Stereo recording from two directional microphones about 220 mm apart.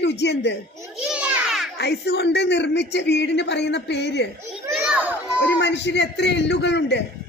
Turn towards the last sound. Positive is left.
turn(degrees=50)  # may be behind; listen again after turning